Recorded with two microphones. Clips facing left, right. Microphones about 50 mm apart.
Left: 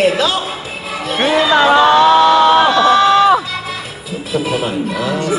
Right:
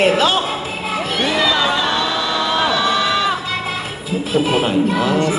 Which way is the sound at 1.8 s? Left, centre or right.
Left.